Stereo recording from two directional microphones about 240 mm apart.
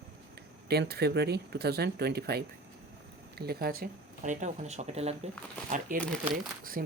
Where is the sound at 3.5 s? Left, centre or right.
Right.